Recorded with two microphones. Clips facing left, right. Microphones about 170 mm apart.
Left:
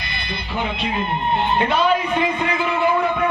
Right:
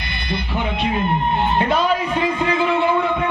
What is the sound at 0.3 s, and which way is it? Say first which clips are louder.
Speech: right 3 dB; 55° right (ahead or behind).